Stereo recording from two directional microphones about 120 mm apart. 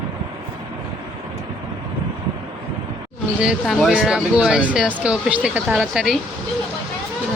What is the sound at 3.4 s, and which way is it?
Speech, 5° right (ahead or behind).